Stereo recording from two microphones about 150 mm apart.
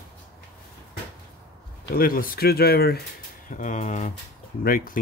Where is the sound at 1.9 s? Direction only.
75° left (ahead or behind).